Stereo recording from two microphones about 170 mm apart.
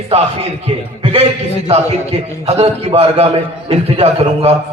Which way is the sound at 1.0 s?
35° right (ahead or behind).